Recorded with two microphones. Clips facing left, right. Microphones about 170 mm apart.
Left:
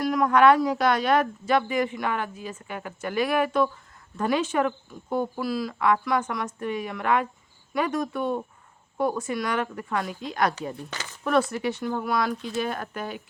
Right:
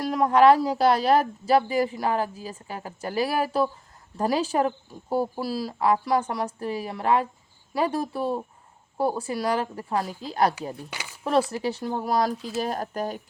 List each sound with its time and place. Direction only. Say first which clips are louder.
0.0 s speech: right 1 dB; 30° right (ahead or behind)
10.8 s a sound: left 1 dB; 10° right (ahead or behind)
11.2 s speech: even; 30° right (ahead or behind)